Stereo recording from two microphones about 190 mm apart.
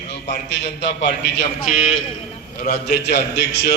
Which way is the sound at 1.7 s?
40° left (ahead or behind).